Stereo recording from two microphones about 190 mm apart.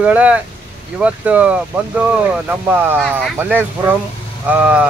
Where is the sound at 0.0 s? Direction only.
5° right (ahead or behind).